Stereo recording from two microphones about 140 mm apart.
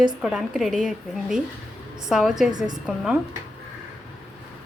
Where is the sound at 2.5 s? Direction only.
30° right (ahead or behind).